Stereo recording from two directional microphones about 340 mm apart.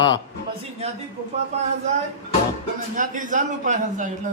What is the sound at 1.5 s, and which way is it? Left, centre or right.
Speech, centre.